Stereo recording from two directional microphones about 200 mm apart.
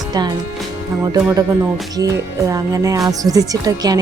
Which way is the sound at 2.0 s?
15° right (ahead or behind).